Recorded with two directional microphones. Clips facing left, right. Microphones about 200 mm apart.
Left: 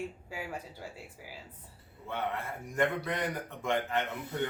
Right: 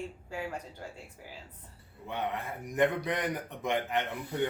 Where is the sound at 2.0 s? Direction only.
15° right (ahead or behind).